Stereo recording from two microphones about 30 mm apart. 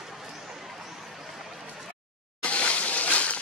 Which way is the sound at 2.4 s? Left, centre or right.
Left.